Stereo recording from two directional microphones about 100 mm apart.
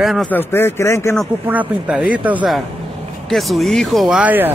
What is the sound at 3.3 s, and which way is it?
Speech, centre (ahead or behind).